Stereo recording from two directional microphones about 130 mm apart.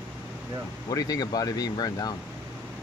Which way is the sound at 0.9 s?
30° left (ahead or behind).